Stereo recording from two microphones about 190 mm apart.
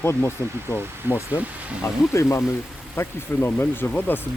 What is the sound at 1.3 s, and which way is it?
Speech, 10° right (ahead or behind).